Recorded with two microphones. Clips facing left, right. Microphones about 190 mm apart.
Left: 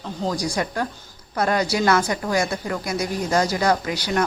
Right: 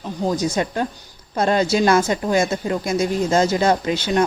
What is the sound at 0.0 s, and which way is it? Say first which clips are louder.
A woman's voice: right 4 dB; 20° right (ahead or behind).